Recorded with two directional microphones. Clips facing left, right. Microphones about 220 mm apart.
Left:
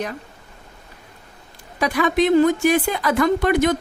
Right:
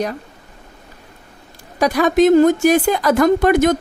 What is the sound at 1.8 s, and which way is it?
Speech, 40° right (ahead or behind).